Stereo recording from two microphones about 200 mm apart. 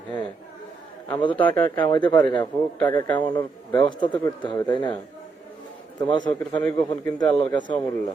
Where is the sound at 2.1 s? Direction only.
25° left (ahead or behind).